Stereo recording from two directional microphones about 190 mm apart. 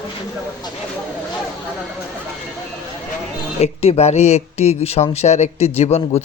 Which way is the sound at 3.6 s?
35° left (ahead or behind).